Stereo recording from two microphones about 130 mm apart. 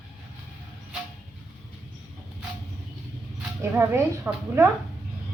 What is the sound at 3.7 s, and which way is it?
Speech, 15° right (ahead or behind).